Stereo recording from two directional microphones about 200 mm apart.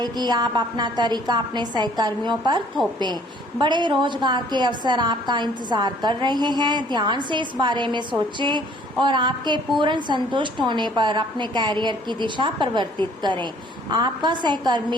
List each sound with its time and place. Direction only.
0.0 s a woman's voice: 20° right (ahead or behind)
3.6 s a woman's voice: 20° right (ahead or behind)